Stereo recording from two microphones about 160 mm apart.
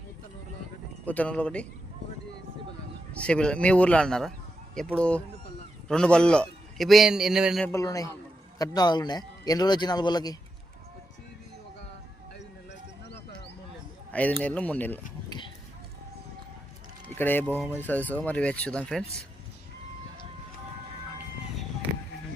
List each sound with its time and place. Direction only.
1.0 s speech: 10° left (ahead or behind)
3.2 s a man's voice: 5° left (ahead or behind)
7.7 s a man's voice: 20° left (ahead or behind)
14.1 s speech: 10° left (ahead or behind)
17.2 s speech: 10° left (ahead or behind)